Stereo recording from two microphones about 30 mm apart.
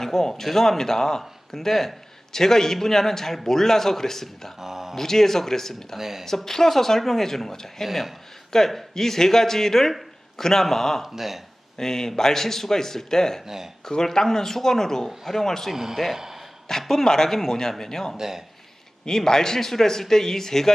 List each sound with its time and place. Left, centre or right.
0.0 s a man's voice: centre
1.2 s speech: centre
2.3 s a man's voice: centre
4.6 s a sound: centre
4.9 s a man's voice: centre
6.0 s speech: centre
6.2 s a man's voice: centre
11.0 s speech: centre
11.8 s a man's voice: centre
15.7 s speech: centre
16.1 s a sound: centre
16.9 s a man's voice: centre
18.2 s speech: centre
19.0 s a man's voice: left